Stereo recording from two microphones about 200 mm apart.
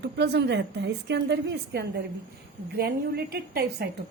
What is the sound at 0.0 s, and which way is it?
A woman's voice, 55° right (ahead or behind).